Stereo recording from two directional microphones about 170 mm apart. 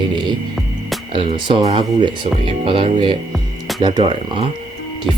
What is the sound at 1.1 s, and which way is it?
Speech, 30° right (ahead or behind).